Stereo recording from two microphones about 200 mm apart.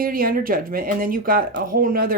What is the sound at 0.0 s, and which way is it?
Speech, 45° right (ahead or behind).